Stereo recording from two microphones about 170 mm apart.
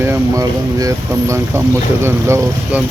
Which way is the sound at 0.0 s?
15° right (ahead or behind).